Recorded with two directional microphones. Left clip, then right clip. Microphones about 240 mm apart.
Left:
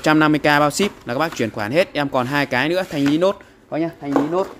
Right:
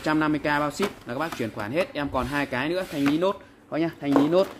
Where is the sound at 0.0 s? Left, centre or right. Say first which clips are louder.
Left 9 dB; left.